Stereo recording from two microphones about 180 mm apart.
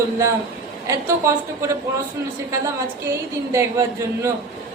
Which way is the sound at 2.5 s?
15° right (ahead or behind).